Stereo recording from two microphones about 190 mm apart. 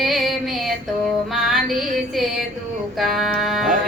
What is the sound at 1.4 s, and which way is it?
Music, centre (ahead or behind).